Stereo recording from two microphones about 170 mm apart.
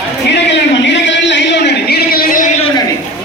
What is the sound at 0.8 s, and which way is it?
A man's voice, 90° left.